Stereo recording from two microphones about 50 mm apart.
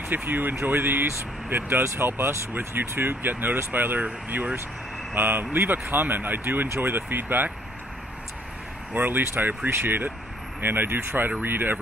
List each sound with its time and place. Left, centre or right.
0.1 s speech: right
2.5 s speech: right
5.1 s speech: right
8.9 s speech: right